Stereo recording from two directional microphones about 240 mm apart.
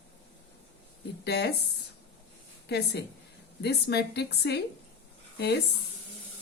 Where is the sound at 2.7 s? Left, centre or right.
Left.